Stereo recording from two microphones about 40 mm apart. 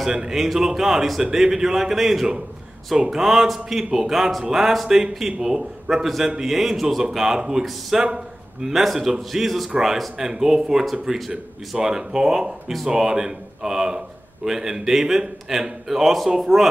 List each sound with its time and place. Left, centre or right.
0.1 s a man's voice: centre
7.9 s a man's voice: centre
10.1 s a man's voice: centre